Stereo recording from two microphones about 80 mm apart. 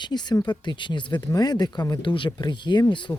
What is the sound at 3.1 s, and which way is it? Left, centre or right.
Speech, left.